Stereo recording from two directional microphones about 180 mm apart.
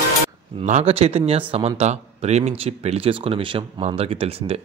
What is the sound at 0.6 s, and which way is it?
A man's voice, 35° right (ahead or behind).